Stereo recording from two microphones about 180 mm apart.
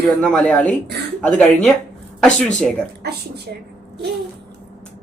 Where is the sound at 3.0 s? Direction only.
65° right (ahead or behind).